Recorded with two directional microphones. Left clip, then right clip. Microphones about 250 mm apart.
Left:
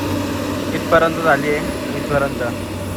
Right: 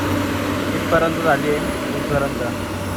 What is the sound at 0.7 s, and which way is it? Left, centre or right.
Speech, centre.